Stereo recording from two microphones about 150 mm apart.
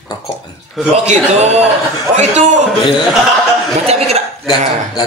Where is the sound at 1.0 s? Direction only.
45° right (ahead or behind).